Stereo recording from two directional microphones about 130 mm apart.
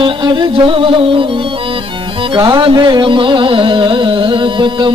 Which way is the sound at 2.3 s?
35° right (ahead or behind).